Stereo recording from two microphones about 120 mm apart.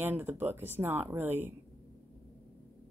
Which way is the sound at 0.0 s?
15° right (ahead or behind).